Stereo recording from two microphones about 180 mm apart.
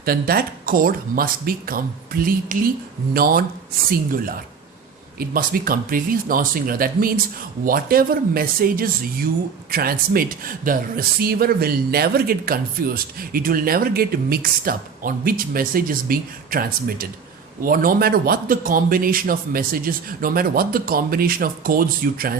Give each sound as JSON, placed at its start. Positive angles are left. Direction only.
{"t": 0.0, "sound": "speech", "side_deg": -55}